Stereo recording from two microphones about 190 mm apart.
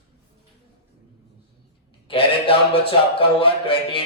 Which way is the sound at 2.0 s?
30° left (ahead or behind).